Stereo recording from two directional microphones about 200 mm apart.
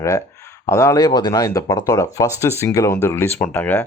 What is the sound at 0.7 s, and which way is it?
Speech, 15° left (ahead or behind).